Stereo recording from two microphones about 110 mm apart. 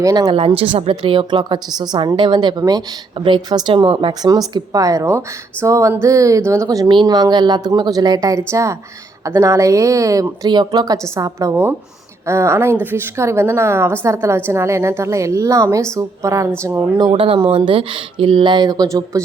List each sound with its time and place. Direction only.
0.0 s speech: 35° right (ahead or behind)
0.3 s a woman's voice: 60° right (ahead or behind); by 2.8 s 35° right (ahead or behind)
3.2 s a woman's voice: 50° right (ahead or behind)
4.2 s speech: 35° right (ahead or behind)
5.0 s a woman's voice: 20° right (ahead or behind)
6.8 s a woman's voice: 45° right (ahead or behind); by 16.8 s 25° right (ahead or behind)
17.0 s a woman's voice: 50° right (ahead or behind); by 19.2 s 30° right (ahead or behind)